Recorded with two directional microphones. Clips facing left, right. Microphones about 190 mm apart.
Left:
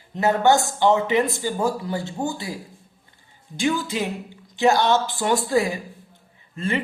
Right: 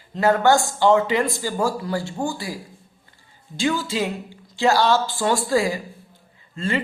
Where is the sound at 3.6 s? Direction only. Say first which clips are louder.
Right 1 dB; 15° left (ahead or behind).